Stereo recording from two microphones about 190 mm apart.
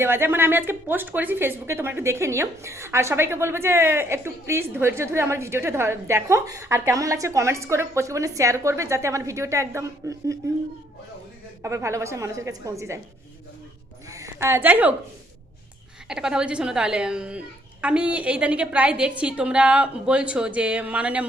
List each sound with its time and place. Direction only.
0.0 s a woman's voice: 10° right (ahead or behind)
11.6 s a woman's voice: 15° right (ahead or behind)
14.1 s a woman's voice: 15° right (ahead or behind)
16.0 s a child's voice: 5° right (ahead or behind)